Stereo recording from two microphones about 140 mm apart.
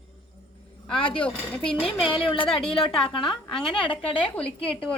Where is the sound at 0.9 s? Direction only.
35° left (ahead or behind).